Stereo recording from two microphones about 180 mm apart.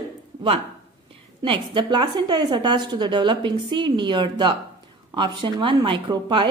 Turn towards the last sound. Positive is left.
turn(degrees=-25)  # may be behind; listen again after turning